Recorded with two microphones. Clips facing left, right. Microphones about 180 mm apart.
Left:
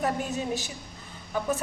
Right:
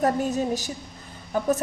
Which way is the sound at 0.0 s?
40° right (ahead or behind).